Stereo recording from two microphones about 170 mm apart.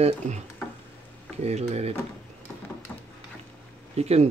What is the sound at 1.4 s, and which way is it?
Speech, 40° right (ahead or behind).